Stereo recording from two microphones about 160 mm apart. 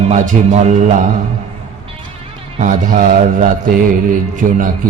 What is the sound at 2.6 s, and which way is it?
Speech, 55° right (ahead or behind).